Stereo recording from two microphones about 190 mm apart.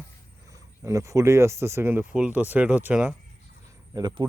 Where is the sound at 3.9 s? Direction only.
25° right (ahead or behind).